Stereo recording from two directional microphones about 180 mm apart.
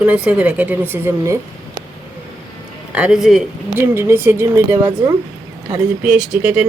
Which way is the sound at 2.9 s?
5° right (ahead or behind).